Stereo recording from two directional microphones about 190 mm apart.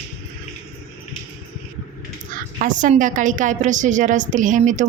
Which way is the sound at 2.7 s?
45° right (ahead or behind).